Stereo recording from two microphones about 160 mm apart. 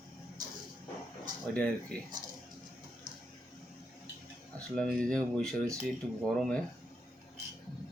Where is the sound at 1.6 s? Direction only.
5° left (ahead or behind).